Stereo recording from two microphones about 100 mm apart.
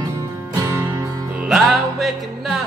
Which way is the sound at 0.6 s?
25° right (ahead or behind).